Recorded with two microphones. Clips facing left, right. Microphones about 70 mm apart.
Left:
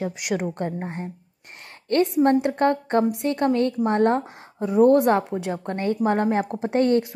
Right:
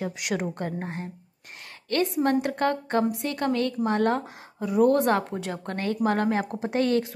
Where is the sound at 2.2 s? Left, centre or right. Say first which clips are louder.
Left 5 dB; left.